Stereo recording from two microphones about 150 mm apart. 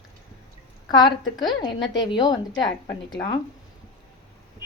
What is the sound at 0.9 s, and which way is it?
A woman's voice, 30° left (ahead or behind).